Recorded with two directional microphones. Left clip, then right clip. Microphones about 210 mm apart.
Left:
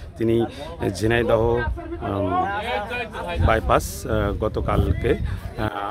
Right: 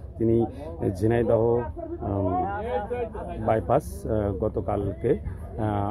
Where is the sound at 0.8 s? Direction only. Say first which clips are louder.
Left 3 dB; centre (ahead or behind).